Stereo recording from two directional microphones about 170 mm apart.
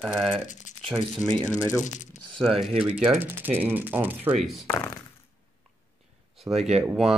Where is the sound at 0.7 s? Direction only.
45° left (ahead or behind).